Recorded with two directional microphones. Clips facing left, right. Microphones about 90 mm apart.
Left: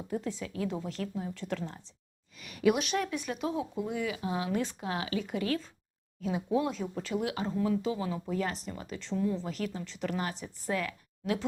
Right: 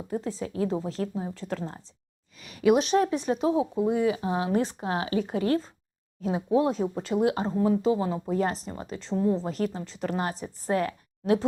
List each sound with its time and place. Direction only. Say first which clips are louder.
0.1 s speech: right 4 dB; 35° right (ahead or behind)